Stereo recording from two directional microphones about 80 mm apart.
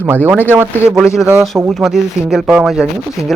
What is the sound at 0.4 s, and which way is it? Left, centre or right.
Speech, right.